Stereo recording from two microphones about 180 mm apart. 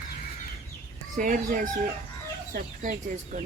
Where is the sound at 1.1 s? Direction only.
50° right (ahead or behind).